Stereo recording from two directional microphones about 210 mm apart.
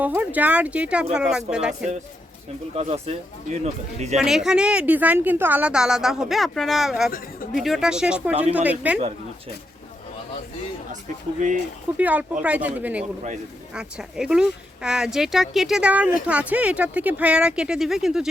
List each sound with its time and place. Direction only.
0.0 s speech: 5° right (ahead or behind)
2.7 s speech: 30° right (ahead or behind)
4.2 s speech: 5° right (ahead or behind)
11.3 s speech: 35° right (ahead or behind)
11.9 s speech: 5° right (ahead or behind)